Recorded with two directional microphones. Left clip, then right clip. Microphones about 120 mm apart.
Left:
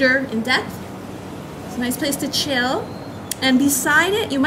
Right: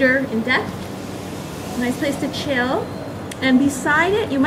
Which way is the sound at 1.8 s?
45° left (ahead or behind).